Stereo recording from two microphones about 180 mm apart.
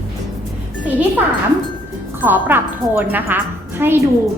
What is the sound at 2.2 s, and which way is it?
A woman's voice, 10° right (ahead or behind).